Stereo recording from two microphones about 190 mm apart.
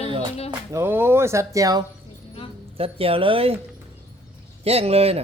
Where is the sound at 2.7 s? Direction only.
30° right (ahead or behind).